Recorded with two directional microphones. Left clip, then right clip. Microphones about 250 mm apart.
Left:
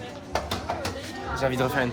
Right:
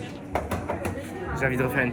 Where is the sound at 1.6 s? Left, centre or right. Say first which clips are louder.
Even; centre.